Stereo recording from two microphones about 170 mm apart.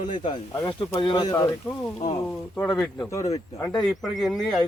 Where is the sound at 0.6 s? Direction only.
30° left (ahead or behind).